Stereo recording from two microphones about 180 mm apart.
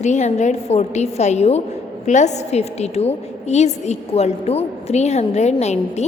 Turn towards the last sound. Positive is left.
turn(degrees=40)  # may be behind; listen again after turning